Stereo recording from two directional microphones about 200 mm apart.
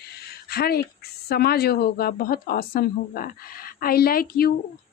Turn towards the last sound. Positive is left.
turn(degrees=50)  # may be behind; listen again after turning